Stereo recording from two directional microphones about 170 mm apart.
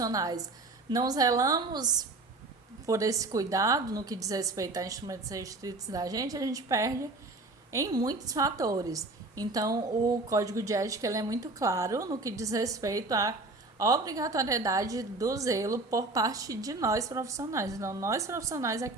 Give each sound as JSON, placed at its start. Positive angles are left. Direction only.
{"t": 0.0, "sound": "a woman's voice", "side_deg": -20}